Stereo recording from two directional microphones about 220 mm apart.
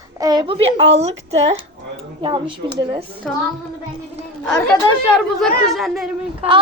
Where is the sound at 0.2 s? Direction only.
20° right (ahead or behind).